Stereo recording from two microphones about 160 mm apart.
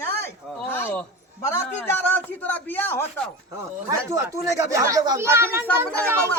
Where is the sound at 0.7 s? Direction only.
10° left (ahead or behind).